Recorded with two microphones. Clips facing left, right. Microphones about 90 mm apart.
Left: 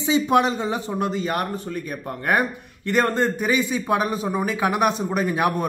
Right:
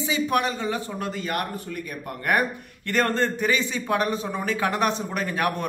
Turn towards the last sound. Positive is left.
turn(degrees=15)  # may be behind; listen again after turning